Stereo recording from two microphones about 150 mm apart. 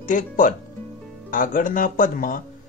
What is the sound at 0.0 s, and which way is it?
Speech, 60° left (ahead or behind).